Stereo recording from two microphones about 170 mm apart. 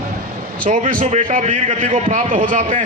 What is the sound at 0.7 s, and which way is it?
A man's voice, 50° right (ahead or behind).